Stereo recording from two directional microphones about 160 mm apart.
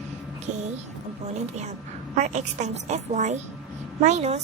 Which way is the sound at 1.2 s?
45° right (ahead or behind).